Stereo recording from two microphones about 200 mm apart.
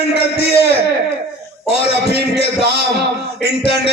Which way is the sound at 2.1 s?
55° right (ahead or behind).